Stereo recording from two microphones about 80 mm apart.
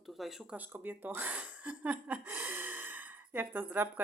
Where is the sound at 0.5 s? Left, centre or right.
Right.